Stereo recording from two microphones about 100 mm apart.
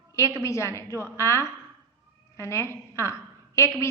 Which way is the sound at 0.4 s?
30° left (ahead or behind).